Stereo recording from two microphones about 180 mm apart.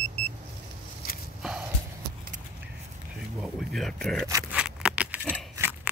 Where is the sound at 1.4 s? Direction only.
5° right (ahead or behind).